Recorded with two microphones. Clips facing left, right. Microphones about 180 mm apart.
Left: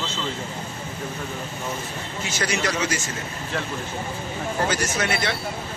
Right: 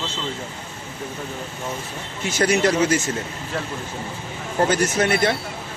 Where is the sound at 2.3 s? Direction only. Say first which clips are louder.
Right 8 dB; 55° right (ahead or behind).